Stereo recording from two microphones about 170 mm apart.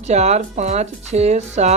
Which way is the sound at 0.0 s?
40° right (ahead or behind).